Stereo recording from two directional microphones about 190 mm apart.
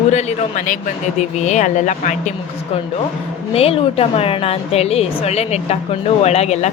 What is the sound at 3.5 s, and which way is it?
A woman's voice, 30° left (ahead or behind).